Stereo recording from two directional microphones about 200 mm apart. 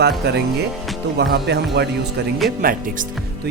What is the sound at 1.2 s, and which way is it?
Speech, 55° right (ahead or behind).